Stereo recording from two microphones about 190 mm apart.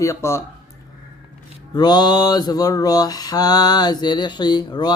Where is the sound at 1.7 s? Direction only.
20° left (ahead or behind).